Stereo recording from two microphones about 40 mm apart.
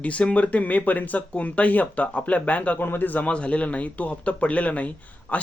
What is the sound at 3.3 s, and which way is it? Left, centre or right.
Speech, left.